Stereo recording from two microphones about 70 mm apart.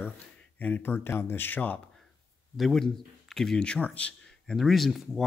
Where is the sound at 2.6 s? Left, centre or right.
Centre.